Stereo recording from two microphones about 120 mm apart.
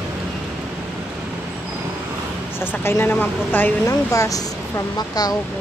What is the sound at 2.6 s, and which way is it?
Speech, 20° left (ahead or behind).